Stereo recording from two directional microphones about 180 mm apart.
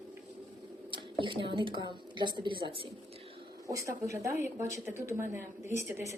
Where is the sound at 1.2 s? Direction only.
30° right (ahead or behind).